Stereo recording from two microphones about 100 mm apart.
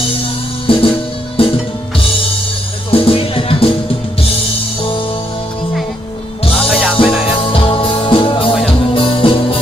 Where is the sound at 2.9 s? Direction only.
65° left (ahead or behind).